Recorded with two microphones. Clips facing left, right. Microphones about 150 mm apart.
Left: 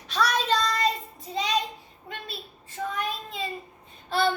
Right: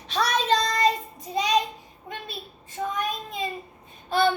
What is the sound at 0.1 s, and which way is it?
Child singing, 25° right (ahead or behind).